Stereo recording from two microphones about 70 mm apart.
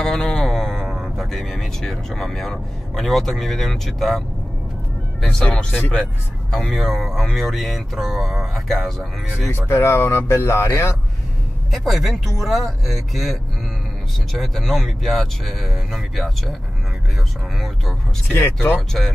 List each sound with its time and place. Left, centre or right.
0.0 s speech: centre
6.5 s speech: centre
9.5 s speech: left
11.7 s speech: centre
14.4 s speech: centre
18.3 s speech: left
18.8 s speech: centre